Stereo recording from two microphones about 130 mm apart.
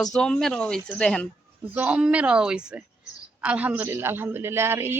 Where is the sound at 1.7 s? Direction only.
10° right (ahead or behind).